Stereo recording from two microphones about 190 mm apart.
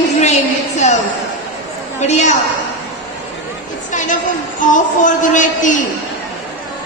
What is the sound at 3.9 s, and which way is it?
A woman's voice, 40° left (ahead or behind).